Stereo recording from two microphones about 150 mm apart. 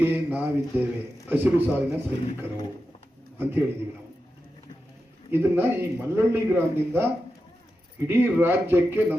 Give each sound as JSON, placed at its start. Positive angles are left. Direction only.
{"t": 0.0, "sound": "a man's voice", "side_deg": -15}
{"t": 3.3, "sound": "a man's voice", "side_deg": -15}
{"t": 5.3, "sound": "a man's voice", "side_deg": -15}